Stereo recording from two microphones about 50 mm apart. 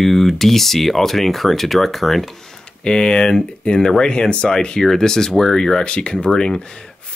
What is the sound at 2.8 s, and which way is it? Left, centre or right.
Speech, centre.